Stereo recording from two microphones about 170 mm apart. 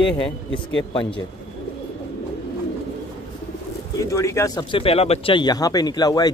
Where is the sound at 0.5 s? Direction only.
90° left.